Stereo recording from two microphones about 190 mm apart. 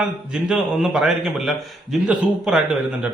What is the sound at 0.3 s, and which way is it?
A man's voice, 5° right (ahead or behind).